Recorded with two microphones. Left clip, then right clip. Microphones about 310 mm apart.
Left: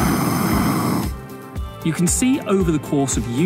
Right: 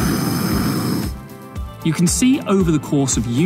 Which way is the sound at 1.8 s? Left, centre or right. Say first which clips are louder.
Right 2 dB; centre.